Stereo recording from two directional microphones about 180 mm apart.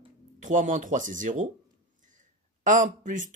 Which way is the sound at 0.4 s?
45° right (ahead or behind).